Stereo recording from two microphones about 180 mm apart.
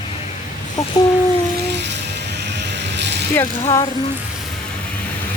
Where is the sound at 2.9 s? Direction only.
75° right (ahead or behind).